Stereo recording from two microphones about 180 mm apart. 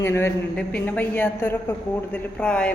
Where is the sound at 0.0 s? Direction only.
15° left (ahead or behind).